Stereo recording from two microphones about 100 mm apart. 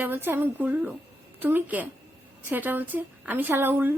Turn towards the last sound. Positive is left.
turn(degrees=-20)  # may be behind; listen again after turning